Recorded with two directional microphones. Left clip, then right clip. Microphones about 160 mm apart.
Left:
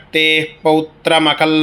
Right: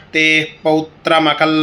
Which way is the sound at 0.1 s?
45° left (ahead or behind).